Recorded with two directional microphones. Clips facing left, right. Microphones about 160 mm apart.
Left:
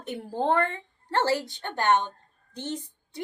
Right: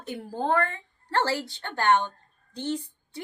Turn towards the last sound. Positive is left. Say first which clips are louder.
# right 3 dB
turn(degrees=20)  # may be behind; listen again after turning